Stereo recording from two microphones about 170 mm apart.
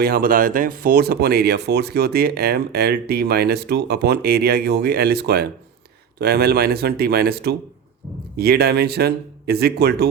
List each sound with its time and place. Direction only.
0.0 s speech: 65° right (ahead or behind)